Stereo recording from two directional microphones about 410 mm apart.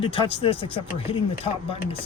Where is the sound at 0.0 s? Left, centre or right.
Centre.